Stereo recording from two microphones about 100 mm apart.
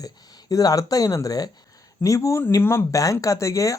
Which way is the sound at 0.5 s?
35° left (ahead or behind).